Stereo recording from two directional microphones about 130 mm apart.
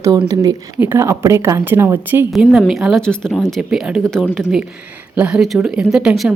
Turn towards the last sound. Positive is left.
turn(degrees=-10)  # may be behind; listen again after turning